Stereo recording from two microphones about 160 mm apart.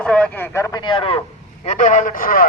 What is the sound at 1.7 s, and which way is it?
Speech, 50° left (ahead or behind).